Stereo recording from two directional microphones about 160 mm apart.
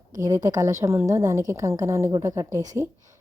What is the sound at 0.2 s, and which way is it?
A woman's voice, 20° right (ahead or behind).